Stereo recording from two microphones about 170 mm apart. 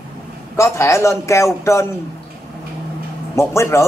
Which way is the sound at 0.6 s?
15° left (ahead or behind).